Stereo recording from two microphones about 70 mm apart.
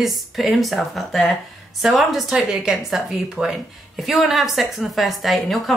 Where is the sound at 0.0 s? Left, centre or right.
Centre.